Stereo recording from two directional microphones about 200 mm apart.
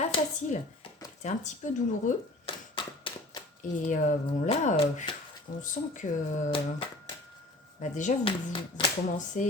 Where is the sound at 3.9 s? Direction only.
35° left (ahead or behind).